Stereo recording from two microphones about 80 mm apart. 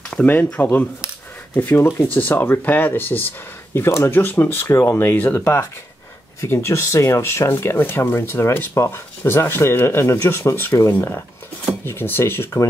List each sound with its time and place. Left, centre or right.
0.1 s speech: centre